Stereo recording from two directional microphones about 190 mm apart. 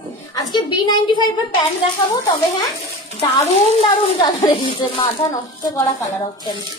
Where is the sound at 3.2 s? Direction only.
35° left (ahead or behind).